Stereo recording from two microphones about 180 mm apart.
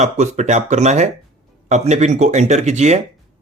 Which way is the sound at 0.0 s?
40° right (ahead or behind).